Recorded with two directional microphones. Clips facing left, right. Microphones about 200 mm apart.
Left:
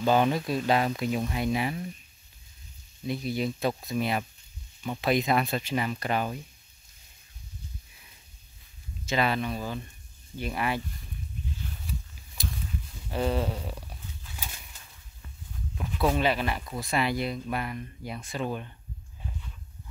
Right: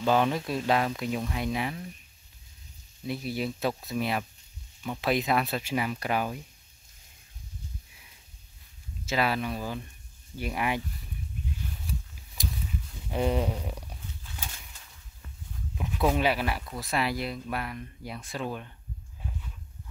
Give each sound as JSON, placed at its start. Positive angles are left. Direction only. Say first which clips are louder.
{"t": 0.0, "sound": "speech", "louder": "left 1 dB", "side_deg": 0}
{"t": 3.1, "sound": "speech", "louder": "left 2 dB", "side_deg": -5}
{"t": 9.0, "sound": "speech", "louder": "left 1 dB", "side_deg": -5}
{"t": 12.4, "sound": "a sound", "louder": "right 1 dB", "side_deg": -15}
{"t": 13.1, "sound": "speech", "louder": "right 1 dB", "side_deg": -15}
{"t": 15.7, "sound": "speech", "louder": "even", "side_deg": -10}